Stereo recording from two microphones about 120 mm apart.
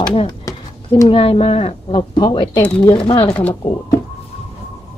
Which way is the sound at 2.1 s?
35° left (ahead or behind).